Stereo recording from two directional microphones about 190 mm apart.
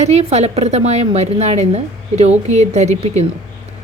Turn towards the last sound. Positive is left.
turn(degrees=-35)  # may be behind; listen again after turning